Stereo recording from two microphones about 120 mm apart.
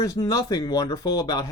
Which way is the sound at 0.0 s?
30° left (ahead or behind).